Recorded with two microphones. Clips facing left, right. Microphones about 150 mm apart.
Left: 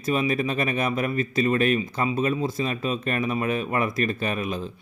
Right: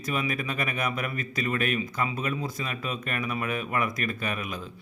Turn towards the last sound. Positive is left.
turn(degrees=30)  # may be behind; listen again after turning